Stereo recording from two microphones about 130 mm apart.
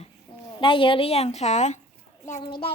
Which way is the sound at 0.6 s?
40° left (ahead or behind).